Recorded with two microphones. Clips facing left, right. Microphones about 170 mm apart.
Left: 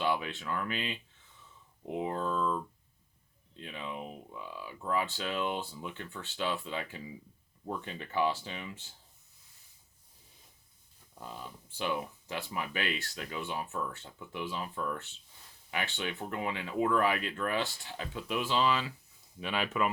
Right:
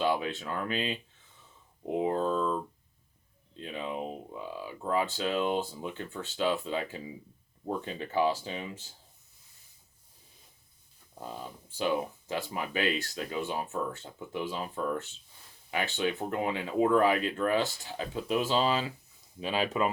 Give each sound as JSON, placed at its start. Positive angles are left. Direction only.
{"t": 0.0, "sound": "speech", "side_deg": -40}
{"t": 11.7, "sound": "speech", "side_deg": -40}